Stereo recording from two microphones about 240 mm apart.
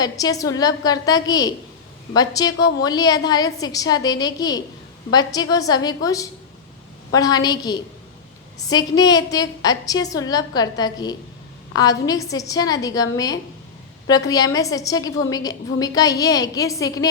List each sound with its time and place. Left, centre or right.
0.0 s a woman's voice: centre